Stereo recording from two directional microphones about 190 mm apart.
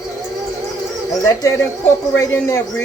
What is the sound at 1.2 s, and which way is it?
Speech, 15° left (ahead or behind).